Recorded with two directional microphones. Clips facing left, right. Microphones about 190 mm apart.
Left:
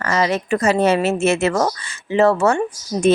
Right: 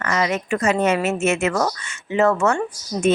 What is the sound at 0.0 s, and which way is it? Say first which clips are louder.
Speech: left 3 dB; 35° left (ahead or behind).